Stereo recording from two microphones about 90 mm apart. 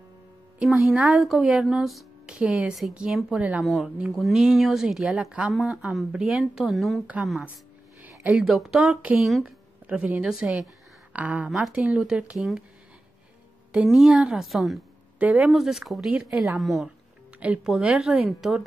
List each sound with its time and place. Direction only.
0.6 s a woman's voice: 5° right (ahead or behind)
5.5 s speech: centre (ahead or behind)
8.0 s a sound: 15° right (ahead or behind)
8.5 s speech: 5° right (ahead or behind)
9.4 s a sound: 10° right (ahead or behind)
10.2 s a woman's voice: 5° right (ahead or behind)
13.8 s speech: 10° right (ahead or behind)
15.1 s a woman's voice: 15° right (ahead or behind)
15.5 s speech: 5° right (ahead or behind)